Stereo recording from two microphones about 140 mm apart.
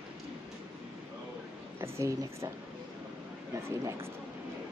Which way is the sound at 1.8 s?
20° right (ahead or behind).